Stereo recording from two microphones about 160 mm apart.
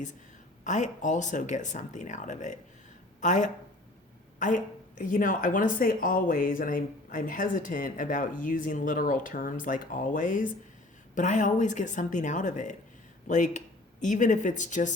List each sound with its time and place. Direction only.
0.6 s a woman's voice: 50° left (ahead or behind)